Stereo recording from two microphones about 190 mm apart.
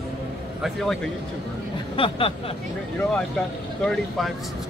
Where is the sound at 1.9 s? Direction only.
30° left (ahead or behind).